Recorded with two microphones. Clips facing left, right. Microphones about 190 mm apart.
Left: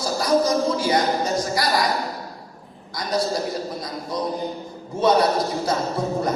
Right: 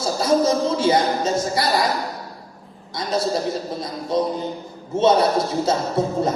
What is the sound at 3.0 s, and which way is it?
A woman's voice, 25° right (ahead or behind).